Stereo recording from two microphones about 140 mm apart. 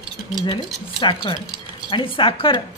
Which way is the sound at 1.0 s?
35° left (ahead or behind).